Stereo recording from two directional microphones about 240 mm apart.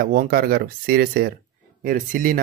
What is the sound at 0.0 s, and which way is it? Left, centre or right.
Speech, right.